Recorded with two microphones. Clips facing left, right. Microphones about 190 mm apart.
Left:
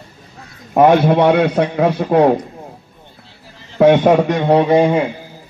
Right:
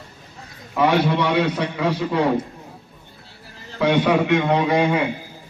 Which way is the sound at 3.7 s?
50° left (ahead or behind).